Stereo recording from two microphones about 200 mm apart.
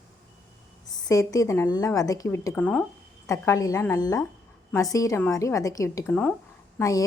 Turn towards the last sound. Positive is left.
turn(degrees=15)  # may be behind; listen again after turning